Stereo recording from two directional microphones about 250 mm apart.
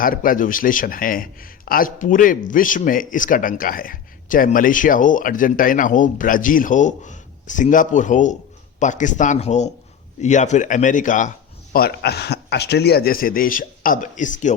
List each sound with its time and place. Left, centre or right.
0.0 s a man's voice: left